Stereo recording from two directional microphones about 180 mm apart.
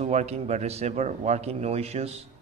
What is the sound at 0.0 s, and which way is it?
A man's voice, 35° right (ahead or behind).